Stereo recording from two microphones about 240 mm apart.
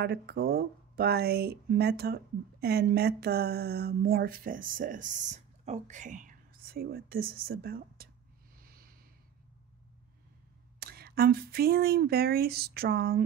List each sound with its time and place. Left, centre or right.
0.0 s speech: right
10.8 s speech: right